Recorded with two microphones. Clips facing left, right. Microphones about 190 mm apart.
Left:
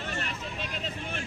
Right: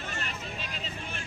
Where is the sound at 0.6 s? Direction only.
55° left (ahead or behind).